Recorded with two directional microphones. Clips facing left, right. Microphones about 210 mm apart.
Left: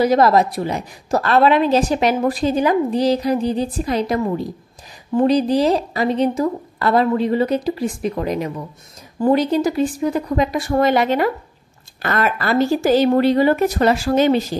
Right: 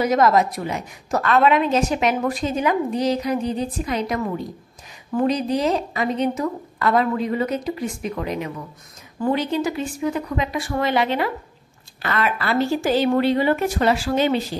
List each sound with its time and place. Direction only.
0.0 s a woman's voice: 35° left (ahead or behind)